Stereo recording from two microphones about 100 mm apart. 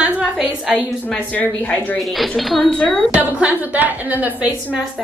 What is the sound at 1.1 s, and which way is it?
Speech, 15° left (ahead or behind).